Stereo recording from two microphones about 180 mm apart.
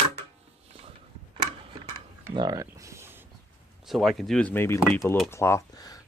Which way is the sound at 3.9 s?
Centre (ahead or behind).